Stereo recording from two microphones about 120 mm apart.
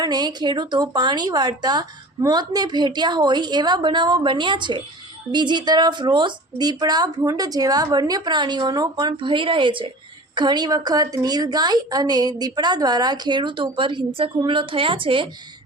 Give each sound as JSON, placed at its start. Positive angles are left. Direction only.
{"t": 0.0, "sound": "a woman's voice", "side_deg": -35}